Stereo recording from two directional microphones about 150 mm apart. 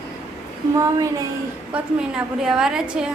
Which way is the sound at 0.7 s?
25° right (ahead or behind).